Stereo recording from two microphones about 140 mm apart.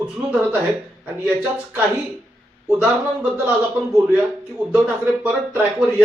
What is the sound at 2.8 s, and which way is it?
Speech, 10° right (ahead or behind).